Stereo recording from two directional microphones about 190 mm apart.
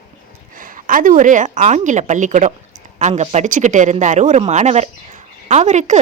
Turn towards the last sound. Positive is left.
turn(degrees=-40)  # may be behind; listen again after turning